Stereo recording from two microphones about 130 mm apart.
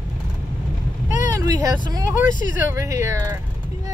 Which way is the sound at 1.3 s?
25° right (ahead or behind).